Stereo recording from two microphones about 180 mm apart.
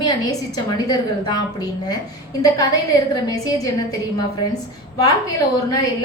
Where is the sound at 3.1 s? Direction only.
20° left (ahead or behind).